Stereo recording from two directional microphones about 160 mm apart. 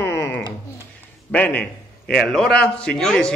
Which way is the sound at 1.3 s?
10° left (ahead or behind).